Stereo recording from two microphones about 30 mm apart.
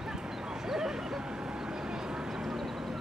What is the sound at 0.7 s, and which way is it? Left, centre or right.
Dog, centre.